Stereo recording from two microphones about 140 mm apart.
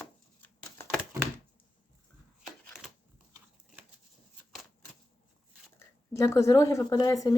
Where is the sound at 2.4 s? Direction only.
Centre (ahead or behind).